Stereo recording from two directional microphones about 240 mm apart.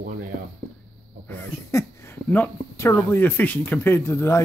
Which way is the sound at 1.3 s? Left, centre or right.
Centre.